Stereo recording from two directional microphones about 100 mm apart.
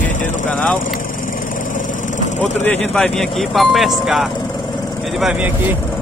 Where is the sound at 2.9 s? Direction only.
5° left (ahead or behind).